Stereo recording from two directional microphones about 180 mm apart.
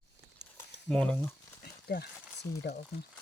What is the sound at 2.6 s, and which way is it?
Speech, 60° left (ahead or behind).